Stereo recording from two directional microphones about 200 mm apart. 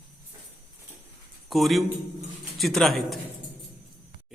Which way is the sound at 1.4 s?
Centre (ahead or behind).